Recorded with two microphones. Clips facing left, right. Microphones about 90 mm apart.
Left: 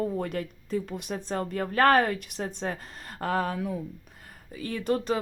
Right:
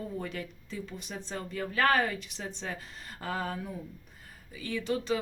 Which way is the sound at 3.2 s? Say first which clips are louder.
Left 7 dB; 60° left (ahead or behind).